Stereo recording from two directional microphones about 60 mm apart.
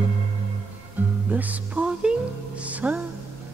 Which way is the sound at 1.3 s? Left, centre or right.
Right.